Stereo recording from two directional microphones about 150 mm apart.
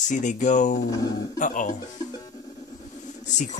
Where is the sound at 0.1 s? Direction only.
55° left (ahead or behind).